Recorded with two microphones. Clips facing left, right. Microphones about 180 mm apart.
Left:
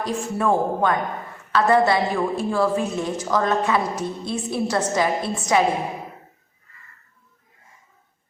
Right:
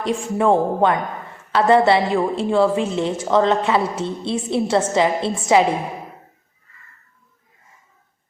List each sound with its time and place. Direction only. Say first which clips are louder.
0.0 s a woman's voice: right 4 dB; 20° right (ahead or behind)